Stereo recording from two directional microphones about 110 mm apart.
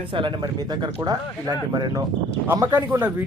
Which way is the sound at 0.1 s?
50° right (ahead or behind).